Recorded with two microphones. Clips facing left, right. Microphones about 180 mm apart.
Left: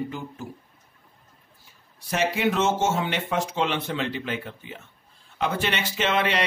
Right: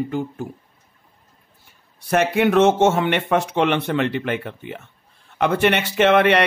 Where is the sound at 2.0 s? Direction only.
60° right (ahead or behind).